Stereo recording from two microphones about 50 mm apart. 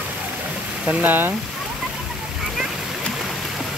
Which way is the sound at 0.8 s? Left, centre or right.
Right.